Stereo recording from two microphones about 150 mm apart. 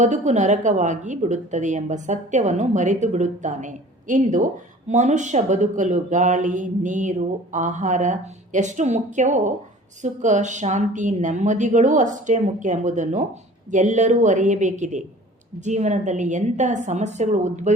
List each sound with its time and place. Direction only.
0.0 s a woman's voice: 50° right (ahead or behind)